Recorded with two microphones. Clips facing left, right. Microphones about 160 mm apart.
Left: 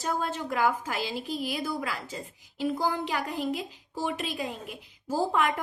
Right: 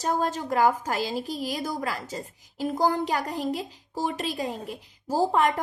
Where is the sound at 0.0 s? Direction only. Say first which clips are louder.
Right 4 dB; 40° right (ahead or behind).